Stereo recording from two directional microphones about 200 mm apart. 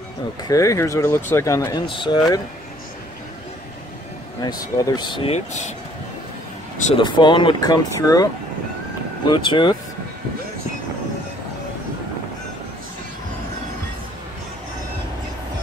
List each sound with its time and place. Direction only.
0.4 s speech: 15° left (ahead or behind)
4.4 s speech: 20° left (ahead or behind)
7.0 s speech: 25° left (ahead or behind)
9.3 s speech: 25° left (ahead or behind)